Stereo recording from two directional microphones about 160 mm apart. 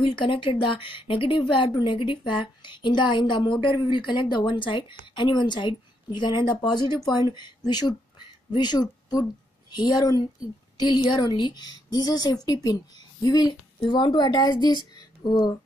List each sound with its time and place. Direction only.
0.2 s speech: 30° left (ahead or behind)